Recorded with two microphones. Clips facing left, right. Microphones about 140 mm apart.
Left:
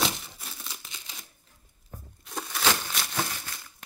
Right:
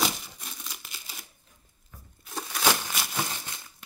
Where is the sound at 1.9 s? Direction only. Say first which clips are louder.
Left 6 dB; 45° left (ahead or behind).